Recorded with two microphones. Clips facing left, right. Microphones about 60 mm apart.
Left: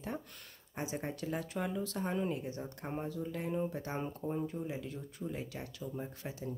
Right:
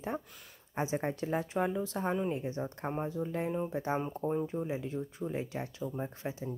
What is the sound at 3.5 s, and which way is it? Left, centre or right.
Speech, centre.